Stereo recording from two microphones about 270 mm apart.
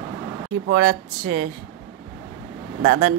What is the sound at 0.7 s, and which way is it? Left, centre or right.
Speech, right.